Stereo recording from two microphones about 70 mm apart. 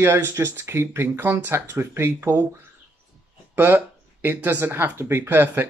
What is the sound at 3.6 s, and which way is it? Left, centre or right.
Speech, right.